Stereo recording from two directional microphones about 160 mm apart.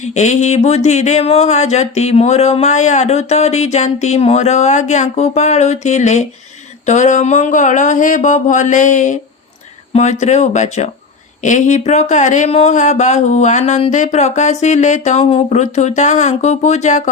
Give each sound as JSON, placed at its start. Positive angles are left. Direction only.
{"t": 0.0, "sound": "speech", "side_deg": 45}